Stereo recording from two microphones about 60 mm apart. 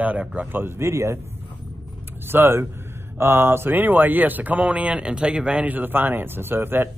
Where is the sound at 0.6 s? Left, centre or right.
Right.